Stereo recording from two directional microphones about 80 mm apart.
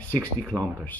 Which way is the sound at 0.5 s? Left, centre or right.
Right.